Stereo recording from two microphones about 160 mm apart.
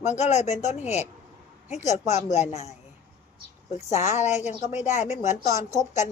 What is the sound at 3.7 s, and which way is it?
Speech, 45° left (ahead or behind).